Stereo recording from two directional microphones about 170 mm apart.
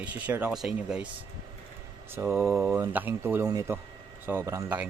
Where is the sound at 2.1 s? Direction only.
15° right (ahead or behind).